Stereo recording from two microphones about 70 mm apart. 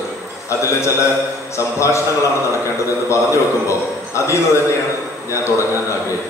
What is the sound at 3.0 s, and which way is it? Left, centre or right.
A man's voice, left.